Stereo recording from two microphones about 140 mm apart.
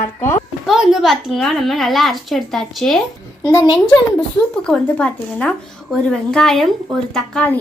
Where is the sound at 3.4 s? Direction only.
30° left (ahead or behind).